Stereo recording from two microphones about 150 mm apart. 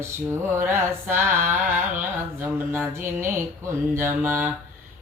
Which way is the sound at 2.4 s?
15° right (ahead or behind).